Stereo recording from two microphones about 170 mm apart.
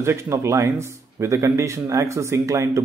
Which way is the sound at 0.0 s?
15° right (ahead or behind).